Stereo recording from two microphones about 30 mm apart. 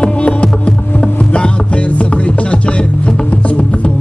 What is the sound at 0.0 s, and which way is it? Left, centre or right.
Music, left.